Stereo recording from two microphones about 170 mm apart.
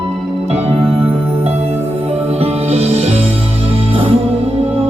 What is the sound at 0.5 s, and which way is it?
Music, 35° right (ahead or behind).